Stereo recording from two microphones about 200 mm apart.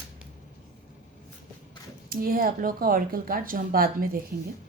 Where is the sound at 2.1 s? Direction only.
45° right (ahead or behind).